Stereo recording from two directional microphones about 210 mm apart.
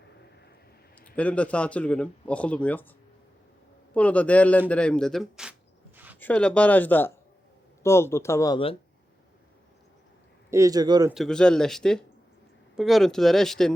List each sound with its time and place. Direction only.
1.0 s speech: 5° left (ahead or behind)
3.9 s speech: 5° left (ahead or behind)
10.5 s a man's voice: 15° right (ahead or behind)
11.1 s speech: centre (ahead or behind)